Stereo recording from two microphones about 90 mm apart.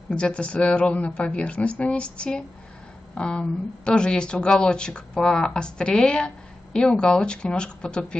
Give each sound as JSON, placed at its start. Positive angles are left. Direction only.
{"t": 0.1, "sound": "speech", "side_deg": 10}